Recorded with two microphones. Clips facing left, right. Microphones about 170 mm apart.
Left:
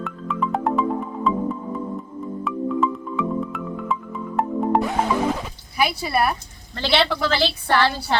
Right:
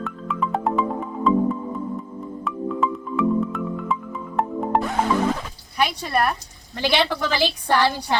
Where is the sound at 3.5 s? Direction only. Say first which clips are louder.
Right 1 dB; centre (ahead or behind).